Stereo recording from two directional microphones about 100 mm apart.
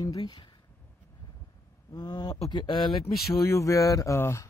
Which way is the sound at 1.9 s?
45° left (ahead or behind).